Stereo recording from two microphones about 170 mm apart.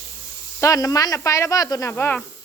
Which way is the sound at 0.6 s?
20° left (ahead or behind).